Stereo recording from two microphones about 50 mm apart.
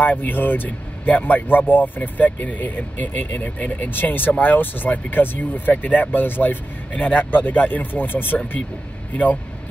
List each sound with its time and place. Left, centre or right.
0.0 s speech: left
3.9 s speech: left
6.9 s speech: left